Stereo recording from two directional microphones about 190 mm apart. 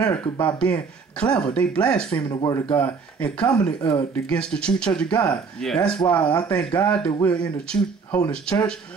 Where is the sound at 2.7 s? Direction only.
5° left (ahead or behind).